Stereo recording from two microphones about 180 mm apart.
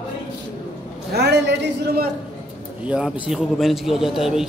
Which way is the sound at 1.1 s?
65° right (ahead or behind).